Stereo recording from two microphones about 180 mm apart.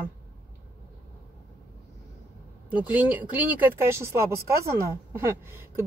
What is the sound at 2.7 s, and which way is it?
Speech, 10° right (ahead or behind).